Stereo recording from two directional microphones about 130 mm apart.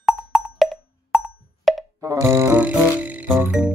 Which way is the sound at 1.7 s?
Centre (ahead or behind).